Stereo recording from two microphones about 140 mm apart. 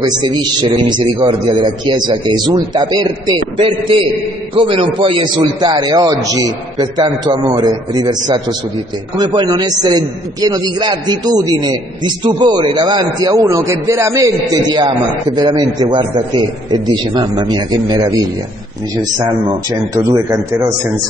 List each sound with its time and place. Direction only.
0.0 s a man's voice: 30° right (ahead or behind)
14.7 s a man's voice: 35° right (ahead or behind)
19.7 s speech: 25° right (ahead or behind)